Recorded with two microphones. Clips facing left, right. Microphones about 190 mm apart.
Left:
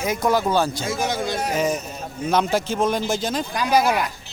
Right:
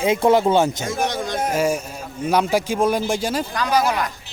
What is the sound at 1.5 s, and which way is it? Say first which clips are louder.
A man's voice: right 2 dB; 10° right (ahead or behind).